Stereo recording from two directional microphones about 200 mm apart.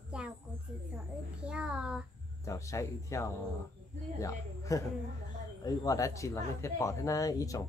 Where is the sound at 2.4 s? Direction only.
15° left (ahead or behind).